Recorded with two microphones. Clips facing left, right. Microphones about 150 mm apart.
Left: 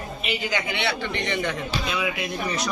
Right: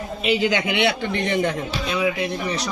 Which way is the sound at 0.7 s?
55° right (ahead or behind).